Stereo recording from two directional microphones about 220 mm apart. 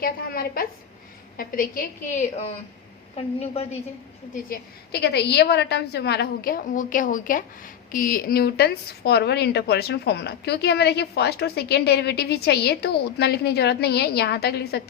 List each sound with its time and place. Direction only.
0.0 s a woman's voice: 45° left (ahead or behind)
4.4 s a woman's voice: 45° left (ahead or behind)